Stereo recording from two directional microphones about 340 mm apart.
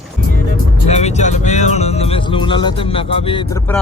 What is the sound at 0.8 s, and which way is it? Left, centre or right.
Speech, centre.